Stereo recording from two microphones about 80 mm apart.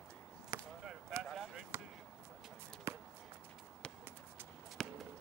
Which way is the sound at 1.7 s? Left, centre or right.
Right.